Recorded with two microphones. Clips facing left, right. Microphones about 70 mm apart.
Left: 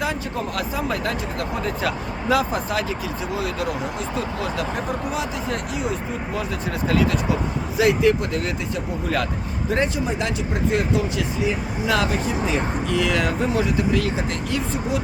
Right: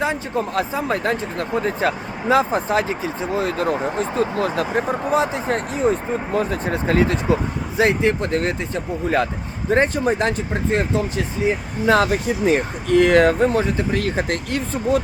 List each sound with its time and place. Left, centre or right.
0.0 s speech: right
12.5 s speech: right